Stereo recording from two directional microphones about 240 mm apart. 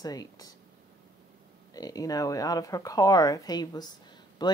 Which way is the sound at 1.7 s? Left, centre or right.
Centre.